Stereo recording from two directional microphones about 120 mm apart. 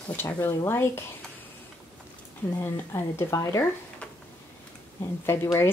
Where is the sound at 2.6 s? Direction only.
20° left (ahead or behind).